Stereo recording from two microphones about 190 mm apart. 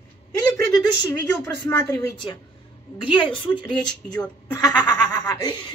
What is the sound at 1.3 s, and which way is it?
Speech, 10° left (ahead or behind).